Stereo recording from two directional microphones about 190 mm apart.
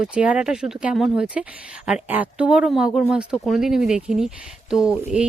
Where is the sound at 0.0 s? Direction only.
5° right (ahead or behind).